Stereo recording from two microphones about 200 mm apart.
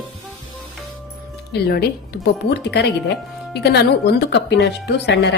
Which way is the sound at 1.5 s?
50° left (ahead or behind).